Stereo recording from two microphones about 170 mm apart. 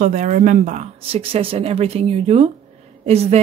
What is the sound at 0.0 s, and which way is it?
Speech, 45° right (ahead or behind).